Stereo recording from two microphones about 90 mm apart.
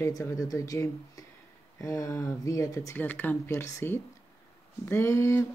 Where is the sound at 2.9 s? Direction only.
20° left (ahead or behind).